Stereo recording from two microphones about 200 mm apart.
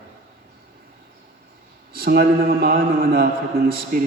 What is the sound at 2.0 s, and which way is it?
A man's voice, 50° right (ahead or behind).